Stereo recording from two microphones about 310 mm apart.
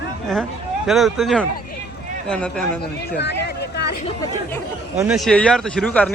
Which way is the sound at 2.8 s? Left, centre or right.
Left.